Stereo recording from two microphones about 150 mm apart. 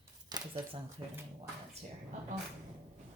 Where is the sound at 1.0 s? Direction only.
35° right (ahead or behind).